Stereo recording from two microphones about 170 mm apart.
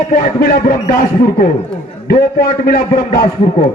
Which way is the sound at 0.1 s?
50° left (ahead or behind).